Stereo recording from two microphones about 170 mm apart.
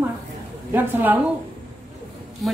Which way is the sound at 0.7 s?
10° right (ahead or behind).